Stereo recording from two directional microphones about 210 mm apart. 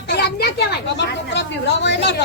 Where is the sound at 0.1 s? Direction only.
50° left (ahead or behind).